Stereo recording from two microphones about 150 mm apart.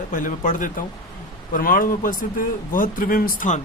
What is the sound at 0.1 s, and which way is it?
Speech, 65° left (ahead or behind).